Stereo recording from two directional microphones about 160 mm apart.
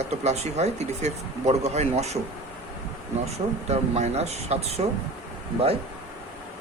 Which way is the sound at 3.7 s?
45° right (ahead or behind).